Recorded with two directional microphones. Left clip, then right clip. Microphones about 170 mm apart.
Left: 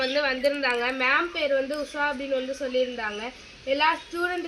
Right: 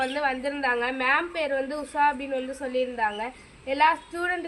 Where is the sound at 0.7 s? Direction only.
10° right (ahead or behind).